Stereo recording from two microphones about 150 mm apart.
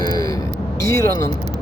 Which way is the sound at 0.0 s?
25° left (ahead or behind).